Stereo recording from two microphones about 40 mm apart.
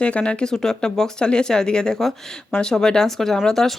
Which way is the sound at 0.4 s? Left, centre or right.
Centre.